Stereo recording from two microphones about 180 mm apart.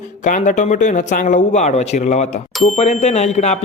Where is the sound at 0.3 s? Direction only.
45° left (ahead or behind).